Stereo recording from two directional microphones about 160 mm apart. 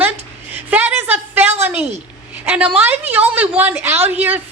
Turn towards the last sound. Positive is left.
turn(degrees=-10)  # may be behind; listen again after turning